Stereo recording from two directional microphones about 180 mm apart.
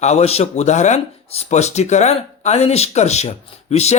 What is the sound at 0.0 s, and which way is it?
Speech, 35° left (ahead or behind).